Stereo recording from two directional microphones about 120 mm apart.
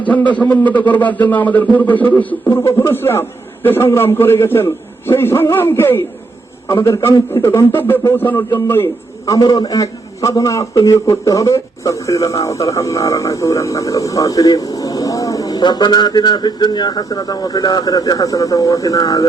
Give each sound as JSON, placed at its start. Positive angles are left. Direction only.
{"t": 0.1, "sound": "a man's voice", "side_deg": 10}